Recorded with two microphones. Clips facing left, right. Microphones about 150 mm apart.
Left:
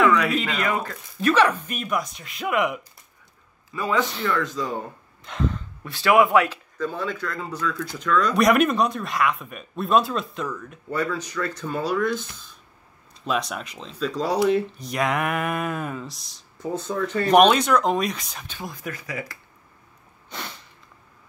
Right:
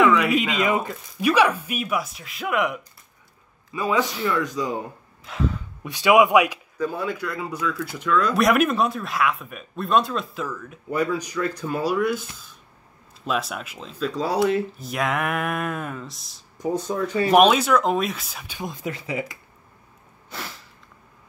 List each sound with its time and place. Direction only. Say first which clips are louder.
0.0 s a sound: right 1 dB; centre (ahead or behind)
0.3 s speech: right 3 dB; 15° right (ahead or behind); by 2.8 s centre (ahead or behind)
3.7 s speech: right 1 dB; 15° right (ahead or behind)
5.9 s speech: right 2 dB; 15° right (ahead or behind); by 16.4 s centre (ahead or behind)
16.5 s speech: right 2 dB; 10° right (ahead or behind)
18.6 s speech: right 4 dB; 20° right (ahead or behind)
20.2 s a sound: even; centre (ahead or behind)